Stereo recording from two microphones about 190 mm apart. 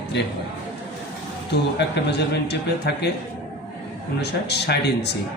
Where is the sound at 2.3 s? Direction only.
60° left (ahead or behind).